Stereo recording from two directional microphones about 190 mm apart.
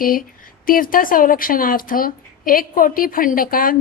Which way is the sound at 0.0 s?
45° left (ahead or behind).